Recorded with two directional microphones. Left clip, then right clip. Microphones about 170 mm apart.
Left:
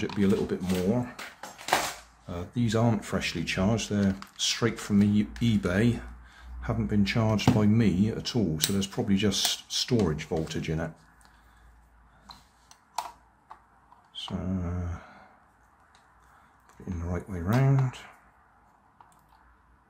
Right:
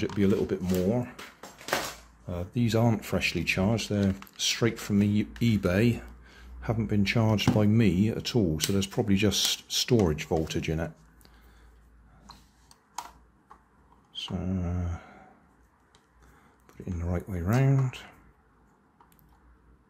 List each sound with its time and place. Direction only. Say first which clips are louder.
0.0 s speech: right 1 dB; 30° right (ahead or behind)
2.2 s speech: right 1 dB; 35° right (ahead or behind)
14.1 s mantra: right 1 dB; 25° right (ahead or behind)
14.4 s a sound: even; 15° right (ahead or behind)
16.6 s speech: right 1 dB; 25° right (ahead or behind)